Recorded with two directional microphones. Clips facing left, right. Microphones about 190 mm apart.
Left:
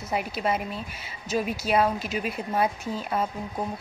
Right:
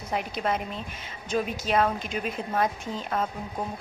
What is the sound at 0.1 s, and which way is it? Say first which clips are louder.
A woman's voice: left 1 dB; 5° left (ahead or behind).